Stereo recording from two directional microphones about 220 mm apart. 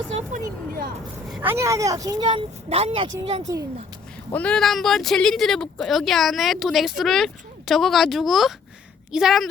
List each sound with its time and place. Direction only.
0.1 s a sound: 30° right (ahead or behind)
1.3 s speech: 10° right (ahead or behind); by 3.1 s 25° right (ahead or behind)
3.4 s speech: 15° right (ahead or behind)
4.3 s speech: 5° left (ahead or behind)